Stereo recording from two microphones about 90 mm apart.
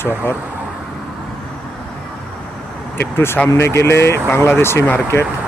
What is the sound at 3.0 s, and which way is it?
Speech, 25° left (ahead or behind).